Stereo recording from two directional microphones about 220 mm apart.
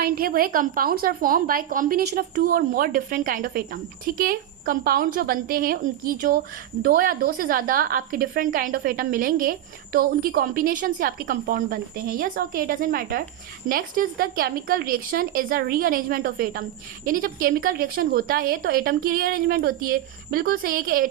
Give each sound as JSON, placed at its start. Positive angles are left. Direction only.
{"t": 0.0, "sound": "a woman's voice", "side_deg": -40}